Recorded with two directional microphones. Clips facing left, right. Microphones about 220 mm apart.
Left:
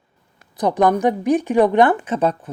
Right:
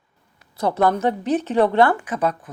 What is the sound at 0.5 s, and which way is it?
A woman's voice, 15° left (ahead or behind).